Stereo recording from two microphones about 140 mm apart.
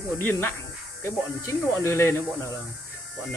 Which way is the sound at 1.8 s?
20° left (ahead or behind).